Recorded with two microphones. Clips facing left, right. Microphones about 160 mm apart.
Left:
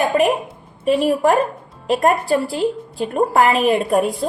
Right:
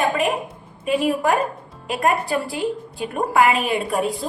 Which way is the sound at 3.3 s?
40° left (ahead or behind).